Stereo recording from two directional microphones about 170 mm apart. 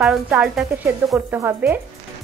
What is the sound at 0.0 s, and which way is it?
A woman's voice, 5° right (ahead or behind).